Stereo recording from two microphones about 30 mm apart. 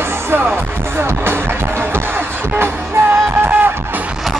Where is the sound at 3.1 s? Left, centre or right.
Right.